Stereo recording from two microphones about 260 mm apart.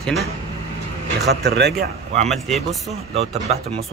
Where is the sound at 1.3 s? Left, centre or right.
Right.